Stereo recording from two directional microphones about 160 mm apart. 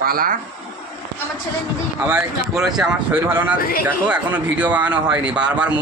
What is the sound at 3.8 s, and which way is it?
A man's voice, 10° right (ahead or behind).